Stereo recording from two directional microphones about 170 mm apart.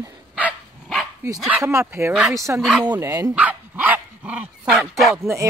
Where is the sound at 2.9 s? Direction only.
20° right (ahead or behind); by 5.2 s centre (ahead or behind).